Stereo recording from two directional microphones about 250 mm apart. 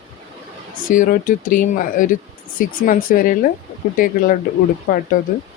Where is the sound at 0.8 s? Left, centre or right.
Left.